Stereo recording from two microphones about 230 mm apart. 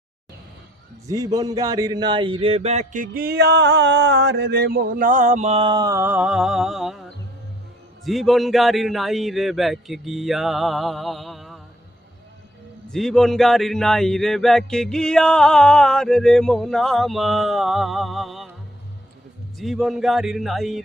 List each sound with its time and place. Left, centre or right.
1.0 s speech: centre
8.0 s speech: centre
12.9 s speech: centre
19.5 s speech: centre